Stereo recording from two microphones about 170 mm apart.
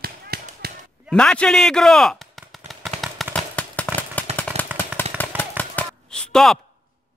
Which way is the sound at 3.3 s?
10° left (ahead or behind).